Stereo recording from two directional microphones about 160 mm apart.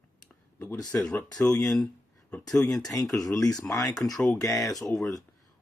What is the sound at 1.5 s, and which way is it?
Speech, 5° left (ahead or behind).